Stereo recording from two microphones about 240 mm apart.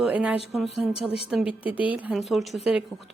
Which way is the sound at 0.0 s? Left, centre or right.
Centre.